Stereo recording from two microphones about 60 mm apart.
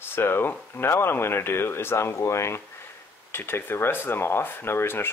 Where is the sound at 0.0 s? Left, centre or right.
Left.